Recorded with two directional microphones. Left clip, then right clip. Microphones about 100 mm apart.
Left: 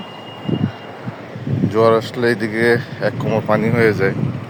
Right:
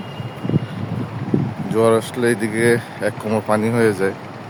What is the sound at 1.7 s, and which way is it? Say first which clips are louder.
Speech: left 2 dB; 20° right (ahead or behind).